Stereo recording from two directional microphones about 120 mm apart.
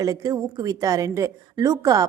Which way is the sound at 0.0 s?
30° right (ahead or behind).